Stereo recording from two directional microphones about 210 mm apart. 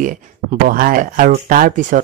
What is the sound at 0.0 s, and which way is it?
Speech, 40° right (ahead or behind).